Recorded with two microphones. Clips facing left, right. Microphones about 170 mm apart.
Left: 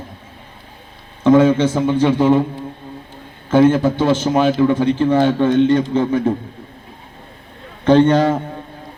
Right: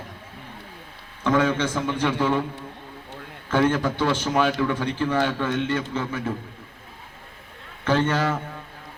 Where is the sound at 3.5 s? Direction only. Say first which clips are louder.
Left 9 dB; 20° left (ahead or behind).